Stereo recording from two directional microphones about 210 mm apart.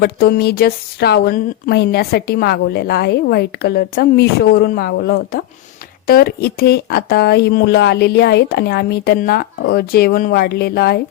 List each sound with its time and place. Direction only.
0.0 s speech: 50° left (ahead or behind)